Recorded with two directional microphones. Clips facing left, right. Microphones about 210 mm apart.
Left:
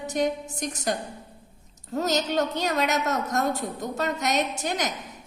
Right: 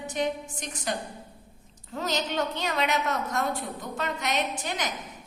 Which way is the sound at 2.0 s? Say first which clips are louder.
Left 4 dB; 40° left (ahead or behind).